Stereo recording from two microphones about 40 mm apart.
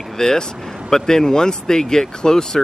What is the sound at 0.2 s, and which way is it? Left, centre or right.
Speech, centre.